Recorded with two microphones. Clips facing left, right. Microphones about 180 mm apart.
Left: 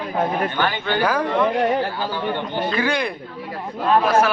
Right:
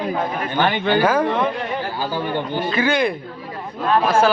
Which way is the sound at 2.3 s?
5° right (ahead or behind).